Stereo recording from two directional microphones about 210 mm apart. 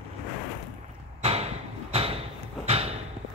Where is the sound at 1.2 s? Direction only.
30° right (ahead or behind).